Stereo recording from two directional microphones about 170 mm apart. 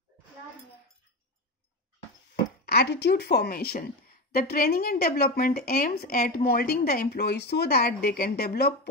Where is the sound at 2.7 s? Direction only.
70° left (ahead or behind).